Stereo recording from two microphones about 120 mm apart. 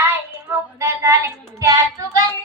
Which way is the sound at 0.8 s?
25° right (ahead or behind).